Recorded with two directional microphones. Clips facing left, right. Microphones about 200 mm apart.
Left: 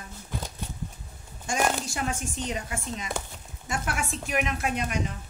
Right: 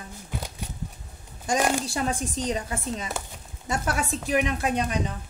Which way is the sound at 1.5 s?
35° right (ahead or behind).